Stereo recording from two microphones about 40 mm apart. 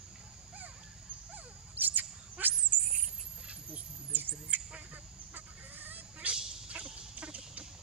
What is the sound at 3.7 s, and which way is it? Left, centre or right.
Cricket, right.